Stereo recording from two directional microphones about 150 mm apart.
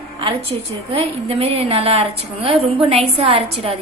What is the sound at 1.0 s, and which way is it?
Speech, 40° right (ahead or behind).